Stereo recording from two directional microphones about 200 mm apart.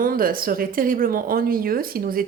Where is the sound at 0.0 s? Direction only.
45° right (ahead or behind).